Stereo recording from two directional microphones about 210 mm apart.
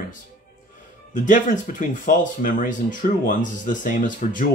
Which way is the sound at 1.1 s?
35° left (ahead or behind).